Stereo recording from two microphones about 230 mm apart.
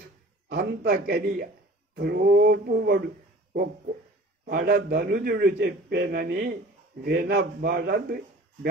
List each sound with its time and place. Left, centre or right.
0.5 s a man's voice: right